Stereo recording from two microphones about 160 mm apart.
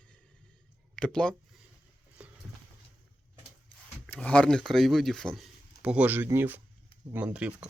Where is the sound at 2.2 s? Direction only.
10° right (ahead or behind).